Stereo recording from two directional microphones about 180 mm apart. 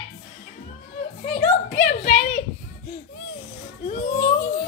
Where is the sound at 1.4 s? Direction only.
45° left (ahead or behind).